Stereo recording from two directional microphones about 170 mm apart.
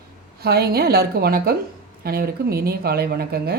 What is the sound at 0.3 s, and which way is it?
Speech, 65° right (ahead or behind).